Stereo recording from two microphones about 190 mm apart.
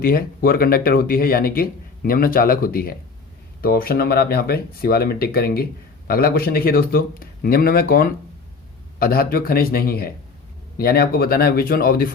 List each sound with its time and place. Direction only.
0.0 s speech: 55° left (ahead or behind)